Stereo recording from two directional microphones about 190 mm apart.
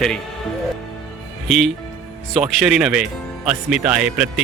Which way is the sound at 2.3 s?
Centre (ahead or behind).